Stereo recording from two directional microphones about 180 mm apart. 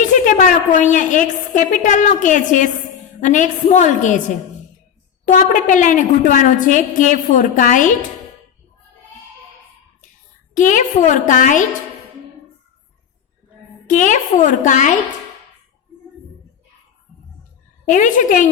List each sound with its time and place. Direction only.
0.1 s a woman's voice: 45° left (ahead or behind)
5.2 s a woman's voice: 45° left (ahead or behind)
10.5 s a woman's voice: 45° left (ahead or behind)
13.8 s a woman's voice: 45° left (ahead or behind)
17.8 s a woman's voice: 45° left (ahead or behind)